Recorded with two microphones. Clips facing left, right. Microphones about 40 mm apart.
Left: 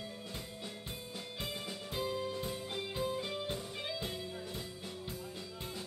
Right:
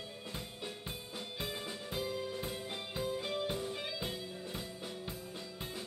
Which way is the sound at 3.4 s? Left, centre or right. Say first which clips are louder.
Right 3 dB; right.